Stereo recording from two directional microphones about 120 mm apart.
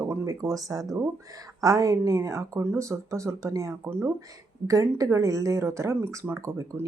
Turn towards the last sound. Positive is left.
turn(degrees=-25)  # may be behind; listen again after turning